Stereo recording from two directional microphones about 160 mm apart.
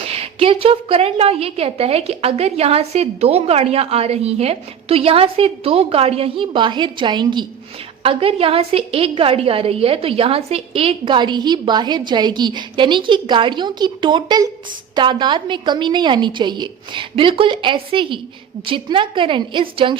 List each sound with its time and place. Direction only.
0.0 s a woman's voice: 40° right (ahead or behind)